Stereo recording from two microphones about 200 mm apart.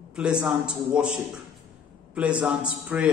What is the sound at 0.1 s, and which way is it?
Speech, 5° right (ahead or behind).